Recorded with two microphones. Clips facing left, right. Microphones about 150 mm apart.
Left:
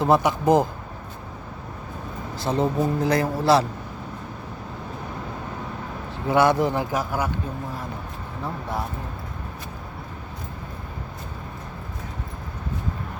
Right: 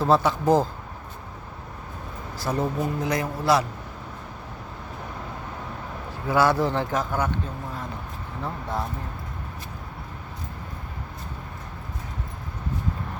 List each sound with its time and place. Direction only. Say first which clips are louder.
0.0 s speech: left 1 dB; 15° left (ahead or behind)
2.4 s a man's voice: left 3 dB; 25° left (ahead or behind)
6.2 s speech: left 2 dB; 20° left (ahead or behind)